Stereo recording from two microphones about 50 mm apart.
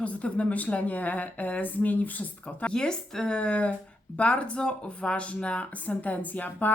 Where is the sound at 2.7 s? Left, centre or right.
Centre; by 6.7 s left.